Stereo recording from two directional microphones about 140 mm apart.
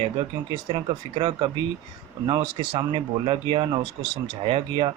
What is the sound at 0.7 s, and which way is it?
Speech, 35° right (ahead or behind).